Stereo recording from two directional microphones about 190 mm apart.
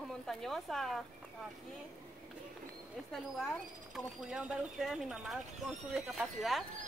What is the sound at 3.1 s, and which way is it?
Speech, centre (ahead or behind).